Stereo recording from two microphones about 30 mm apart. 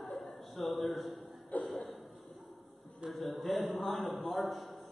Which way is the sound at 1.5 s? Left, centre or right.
Left.